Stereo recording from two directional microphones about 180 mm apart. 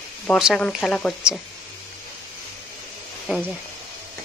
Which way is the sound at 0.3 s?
Centre (ahead or behind).